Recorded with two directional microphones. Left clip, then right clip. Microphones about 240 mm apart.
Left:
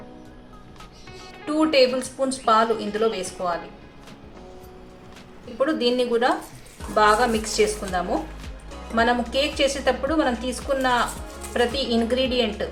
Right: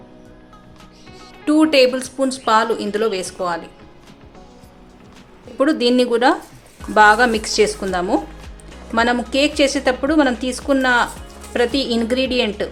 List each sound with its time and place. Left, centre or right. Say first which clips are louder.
1.5 s a woman's voice: right 5 dB; right
5.5 s speech: right 6 dB; right
8.4 s music: even; centre
9.3 s speech: right 6 dB; right